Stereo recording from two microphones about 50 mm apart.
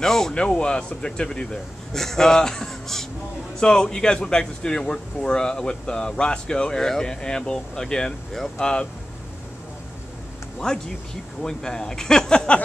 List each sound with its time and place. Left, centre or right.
0.0 s speech: centre
0.3 s speech: centre
10.6 s speech: centre